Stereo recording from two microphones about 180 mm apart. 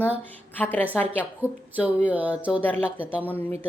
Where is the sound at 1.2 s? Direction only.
10° right (ahead or behind).